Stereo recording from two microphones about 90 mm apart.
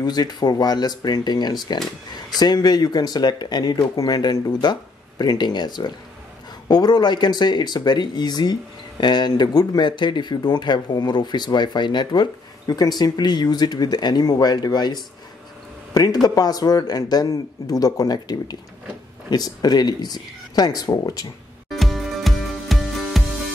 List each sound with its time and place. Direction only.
0.0 s speech: 50° left (ahead or behind)
21.6 s music: centre (ahead or behind)